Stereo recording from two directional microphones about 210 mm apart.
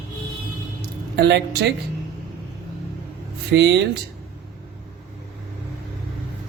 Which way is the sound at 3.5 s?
55° right (ahead or behind).